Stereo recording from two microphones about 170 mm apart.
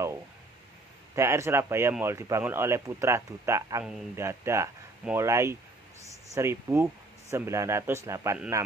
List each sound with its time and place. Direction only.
1.1 s a man's voice: 15° right (ahead or behind)